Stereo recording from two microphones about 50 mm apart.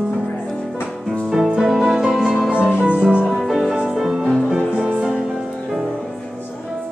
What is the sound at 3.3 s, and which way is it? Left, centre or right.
Music, centre.